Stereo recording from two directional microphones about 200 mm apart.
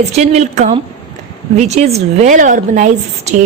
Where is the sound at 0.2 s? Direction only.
35° right (ahead or behind).